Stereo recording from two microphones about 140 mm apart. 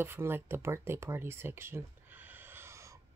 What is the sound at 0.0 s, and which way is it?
Speech, 15° right (ahead or behind).